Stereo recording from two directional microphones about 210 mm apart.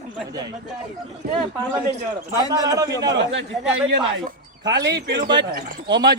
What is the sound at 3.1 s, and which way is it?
Speech, 60° right (ahead or behind).